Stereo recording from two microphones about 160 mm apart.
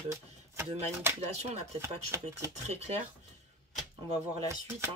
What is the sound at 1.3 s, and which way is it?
Speech, 45° right (ahead or behind).